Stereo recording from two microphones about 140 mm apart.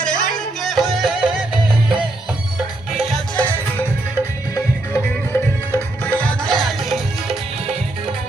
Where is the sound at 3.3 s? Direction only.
10° left (ahead or behind).